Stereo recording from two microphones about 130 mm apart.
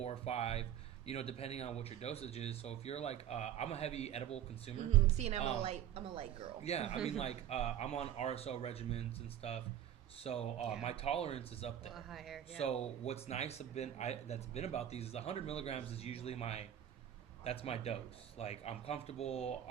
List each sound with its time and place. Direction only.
0.0 s speech: 55° left (ahead or behind)
5.0 s a woman's voice: 55° right (ahead or behind)
6.7 s a man's voice: 55° left (ahead or behind)
11.9 s speech: centre (ahead or behind)
12.5 s a man's voice: 55° left (ahead or behind)